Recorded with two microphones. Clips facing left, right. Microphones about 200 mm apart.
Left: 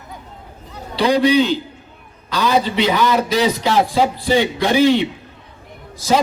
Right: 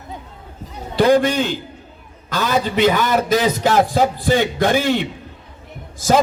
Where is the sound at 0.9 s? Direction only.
50° right (ahead or behind).